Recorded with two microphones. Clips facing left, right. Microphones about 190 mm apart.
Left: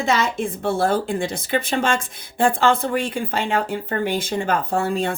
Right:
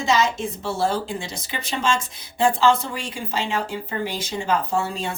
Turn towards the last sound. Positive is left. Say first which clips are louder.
# left 4 dB
turn(degrees=55)  # may be behind; listen again after turning